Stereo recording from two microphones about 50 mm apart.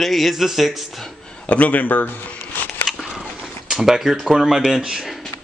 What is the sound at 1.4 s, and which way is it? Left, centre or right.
Shuffling cards, left.